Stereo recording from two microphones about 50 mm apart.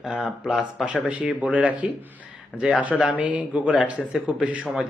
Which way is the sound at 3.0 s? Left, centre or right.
Right.